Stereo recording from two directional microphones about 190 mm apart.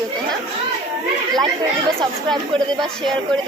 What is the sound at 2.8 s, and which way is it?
Speech, centre (ahead or behind).